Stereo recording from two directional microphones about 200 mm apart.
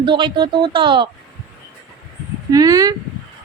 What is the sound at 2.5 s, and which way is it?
Speech, 15° right (ahead or behind).